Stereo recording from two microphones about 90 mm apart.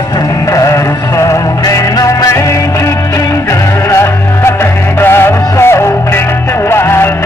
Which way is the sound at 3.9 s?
30° left (ahead or behind).